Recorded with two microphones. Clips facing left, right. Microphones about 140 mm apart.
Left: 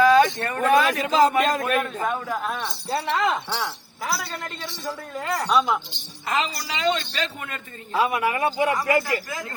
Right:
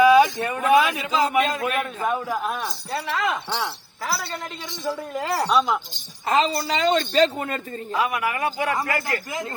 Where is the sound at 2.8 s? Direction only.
25° left (ahead or behind).